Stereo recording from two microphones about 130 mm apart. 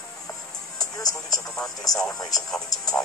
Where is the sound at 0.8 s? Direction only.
25° left (ahead or behind).